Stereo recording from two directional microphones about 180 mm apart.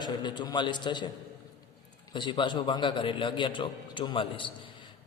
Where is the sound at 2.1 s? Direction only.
25° left (ahead or behind).